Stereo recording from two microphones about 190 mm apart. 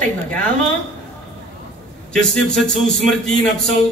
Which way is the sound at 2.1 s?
5° left (ahead or behind).